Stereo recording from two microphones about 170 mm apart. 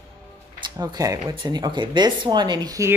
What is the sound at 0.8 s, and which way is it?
Speech, 20° right (ahead or behind).